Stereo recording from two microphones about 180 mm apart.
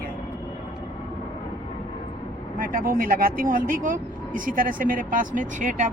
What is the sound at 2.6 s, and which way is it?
Speech, 50° right (ahead or behind).